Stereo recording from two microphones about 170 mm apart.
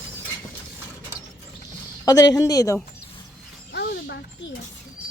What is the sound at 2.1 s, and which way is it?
Speech, 20° left (ahead or behind).